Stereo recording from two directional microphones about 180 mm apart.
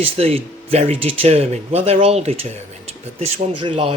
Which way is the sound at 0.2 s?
35° right (ahead or behind).